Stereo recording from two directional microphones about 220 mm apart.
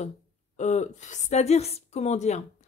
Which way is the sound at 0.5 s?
30° left (ahead or behind).